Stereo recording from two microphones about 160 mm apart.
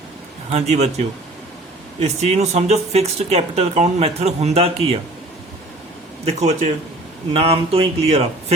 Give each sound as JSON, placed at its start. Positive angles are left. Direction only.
{"t": 0.5, "sound": "speech", "side_deg": -45}
{"t": 6.2, "sound": "speech", "side_deg": -45}